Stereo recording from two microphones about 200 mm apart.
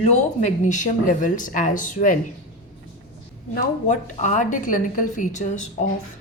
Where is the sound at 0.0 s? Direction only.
35° left (ahead or behind).